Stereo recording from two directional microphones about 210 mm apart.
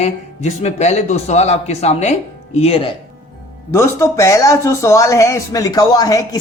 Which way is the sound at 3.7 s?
10° left (ahead or behind).